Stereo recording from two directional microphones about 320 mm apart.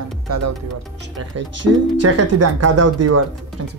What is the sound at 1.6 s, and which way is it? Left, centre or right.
Speech, right.